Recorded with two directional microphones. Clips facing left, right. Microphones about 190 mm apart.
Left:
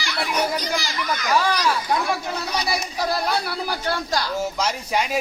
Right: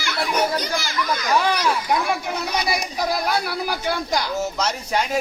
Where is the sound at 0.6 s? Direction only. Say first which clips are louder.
Even; 55° right (ahead or behind).